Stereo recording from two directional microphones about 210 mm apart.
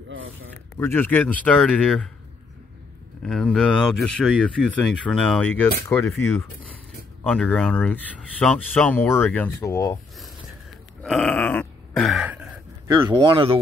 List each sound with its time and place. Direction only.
0.7 s speech: 10° left (ahead or behind)
3.2 s speech: 5° left (ahead or behind)
11.0 s a sound: 5° left (ahead or behind)
12.8 s speech: 15° right (ahead or behind)